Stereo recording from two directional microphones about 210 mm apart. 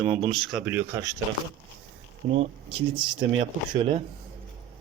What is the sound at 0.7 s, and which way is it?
Speech, 10° right (ahead or behind).